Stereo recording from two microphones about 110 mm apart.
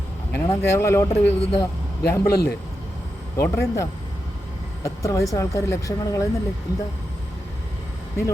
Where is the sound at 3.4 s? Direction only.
25° left (ahead or behind).